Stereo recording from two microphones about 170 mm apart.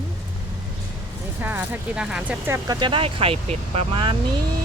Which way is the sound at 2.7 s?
30° right (ahead or behind).